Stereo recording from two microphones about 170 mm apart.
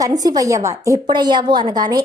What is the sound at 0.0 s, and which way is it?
A woman's voice, 20° right (ahead or behind).